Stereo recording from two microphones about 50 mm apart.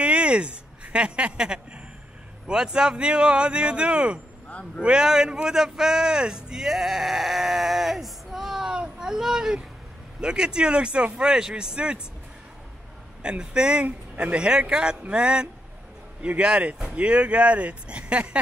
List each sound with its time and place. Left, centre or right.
0.0 s a sound: right
2.4 s speech: centre
4.5 s speech: left
4.8 s speech: centre
8.6 s a sound: centre
10.2 s speech: centre
13.2 s speech: centre